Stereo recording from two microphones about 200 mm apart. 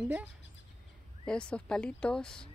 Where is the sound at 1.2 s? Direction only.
5° left (ahead or behind).